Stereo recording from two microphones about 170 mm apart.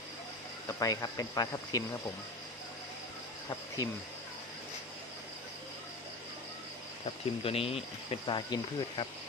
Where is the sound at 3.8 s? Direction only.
20° left (ahead or behind).